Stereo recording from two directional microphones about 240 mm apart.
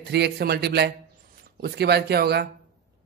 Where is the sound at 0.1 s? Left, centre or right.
Right.